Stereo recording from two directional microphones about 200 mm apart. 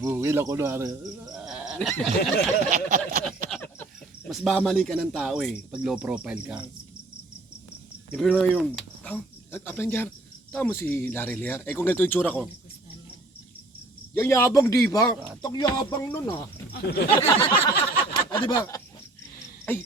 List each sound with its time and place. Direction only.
0.0 s speech: 15° right (ahead or behind)
1.3 s goat: 5° right (ahead or behind)
2.6 s a sound: 40° right (ahead or behind)
4.3 s speech: centre (ahead or behind)
8.1 s speech: 5° left (ahead or behind)
14.1 s speech: 10° left (ahead or behind)
16.7 s speech: 50° left (ahead or behind)
17.4 s a sound: 25° left (ahead or behind)